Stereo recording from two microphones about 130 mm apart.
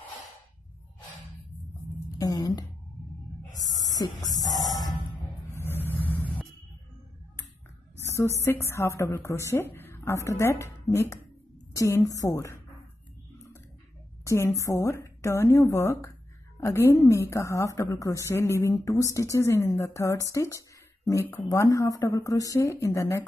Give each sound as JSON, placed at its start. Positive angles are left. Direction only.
{"t": 2.0, "sound": "a sound", "side_deg": 30}
{"t": 3.5, "sound": "hum", "side_deg": 25}
{"t": 5.5, "sound": "vehicle", "side_deg": 15}
{"t": 8.0, "sound": "a sound", "side_deg": 20}
{"t": 8.6, "sound": "a woman's voice", "side_deg": 20}
{"t": 14.2, "sound": "a woman's voice", "side_deg": 20}